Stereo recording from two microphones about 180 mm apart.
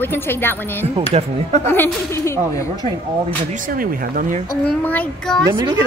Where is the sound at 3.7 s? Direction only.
50° right (ahead or behind).